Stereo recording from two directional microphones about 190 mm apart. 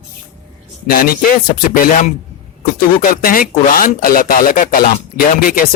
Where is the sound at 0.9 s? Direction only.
50° left (ahead or behind).